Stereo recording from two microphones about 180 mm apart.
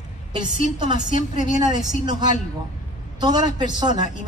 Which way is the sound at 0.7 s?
25° right (ahead or behind).